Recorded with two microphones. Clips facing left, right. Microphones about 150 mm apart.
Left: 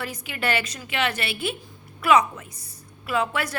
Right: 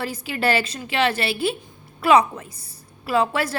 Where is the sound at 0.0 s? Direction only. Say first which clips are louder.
Right 5 dB; 30° right (ahead or behind).